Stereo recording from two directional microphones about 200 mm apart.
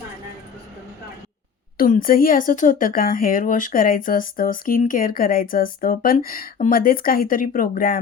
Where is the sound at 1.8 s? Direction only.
45° left (ahead or behind).